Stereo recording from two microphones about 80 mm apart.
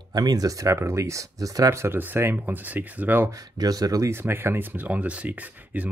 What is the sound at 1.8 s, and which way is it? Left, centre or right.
Speech, right.